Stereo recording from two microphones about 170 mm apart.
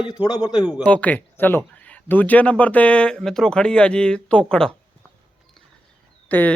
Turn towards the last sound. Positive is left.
turn(degrees=10)  # may be behind; listen again after turning